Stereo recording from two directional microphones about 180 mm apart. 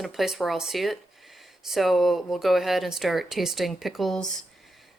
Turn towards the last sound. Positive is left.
turn(degrees=0)  # may be behind; listen again after turning